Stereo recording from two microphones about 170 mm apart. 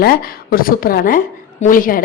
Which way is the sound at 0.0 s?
65° left (ahead or behind).